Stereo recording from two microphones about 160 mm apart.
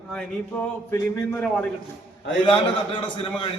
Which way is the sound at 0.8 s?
15° left (ahead or behind).